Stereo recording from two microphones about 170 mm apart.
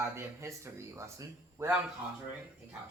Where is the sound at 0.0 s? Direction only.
15° right (ahead or behind).